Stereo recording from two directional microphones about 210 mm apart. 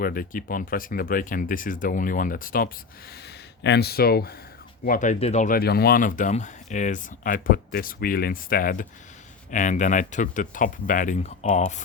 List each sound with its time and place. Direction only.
0.0 s speech: 45° left (ahead or behind)
3.6 s speech: 55° left (ahead or behind)
4.9 s speech: 35° left (ahead or behind)